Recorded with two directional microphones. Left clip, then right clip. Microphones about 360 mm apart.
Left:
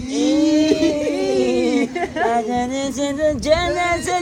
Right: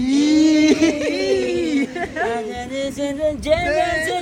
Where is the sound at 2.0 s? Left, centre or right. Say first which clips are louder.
Left 3 dB; centre.